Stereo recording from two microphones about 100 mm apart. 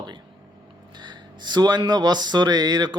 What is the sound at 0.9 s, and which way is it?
Music, 50° right (ahead or behind).